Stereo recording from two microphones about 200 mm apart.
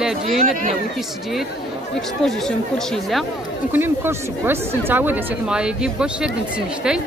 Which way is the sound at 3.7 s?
10° right (ahead or behind).